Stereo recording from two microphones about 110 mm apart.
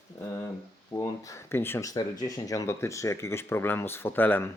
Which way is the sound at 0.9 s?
30° left (ahead or behind).